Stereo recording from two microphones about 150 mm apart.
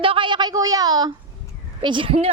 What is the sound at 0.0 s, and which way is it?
A woman's voice, 35° right (ahead or behind).